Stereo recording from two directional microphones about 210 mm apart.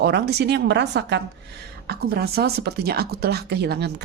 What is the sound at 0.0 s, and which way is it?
Speech, 50° right (ahead or behind).